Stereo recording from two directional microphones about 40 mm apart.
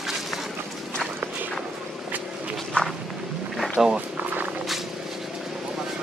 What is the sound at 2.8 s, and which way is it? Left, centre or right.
Walk, left.